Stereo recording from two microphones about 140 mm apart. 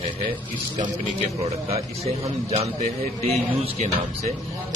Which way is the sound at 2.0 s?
50° right (ahead or behind).